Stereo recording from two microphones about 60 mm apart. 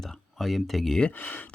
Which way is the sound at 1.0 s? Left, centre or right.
Left.